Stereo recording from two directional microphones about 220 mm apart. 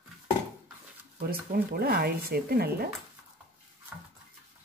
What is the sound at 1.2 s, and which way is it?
Speech, 45° right (ahead or behind).